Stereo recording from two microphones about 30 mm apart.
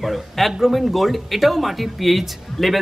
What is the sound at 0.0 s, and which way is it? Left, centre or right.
Speech, centre.